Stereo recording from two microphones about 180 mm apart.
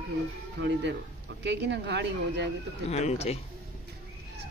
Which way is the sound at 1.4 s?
75° right (ahead or behind).